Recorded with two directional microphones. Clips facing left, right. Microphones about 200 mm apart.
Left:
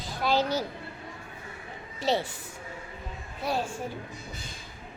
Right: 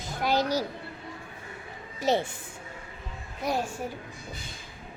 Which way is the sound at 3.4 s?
15° right (ahead or behind).